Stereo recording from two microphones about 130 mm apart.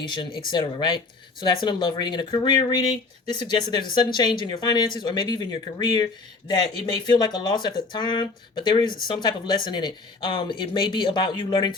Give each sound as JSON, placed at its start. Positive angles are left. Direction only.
{"t": 0.2, "sound": "speech", "side_deg": 40}